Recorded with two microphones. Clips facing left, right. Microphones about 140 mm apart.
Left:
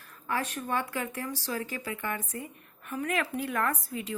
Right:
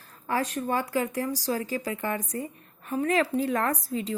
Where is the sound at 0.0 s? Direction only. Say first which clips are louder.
Right 4 dB; 35° right (ahead or behind).